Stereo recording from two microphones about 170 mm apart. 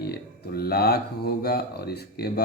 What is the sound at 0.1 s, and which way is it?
Speech, 65° left (ahead or behind).